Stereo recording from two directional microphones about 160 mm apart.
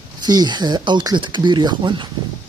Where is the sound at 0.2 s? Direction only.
25° right (ahead or behind).